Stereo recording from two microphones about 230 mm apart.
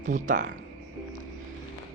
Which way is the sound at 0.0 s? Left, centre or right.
Right.